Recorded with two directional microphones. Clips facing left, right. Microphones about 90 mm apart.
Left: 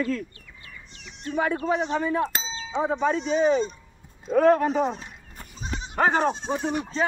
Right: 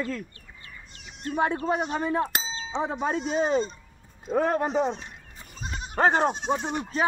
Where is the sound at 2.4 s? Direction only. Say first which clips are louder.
Left 3 dB; 30° right (ahead or behind).